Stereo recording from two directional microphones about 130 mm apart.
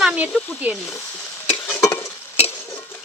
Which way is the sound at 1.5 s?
15° left (ahead or behind).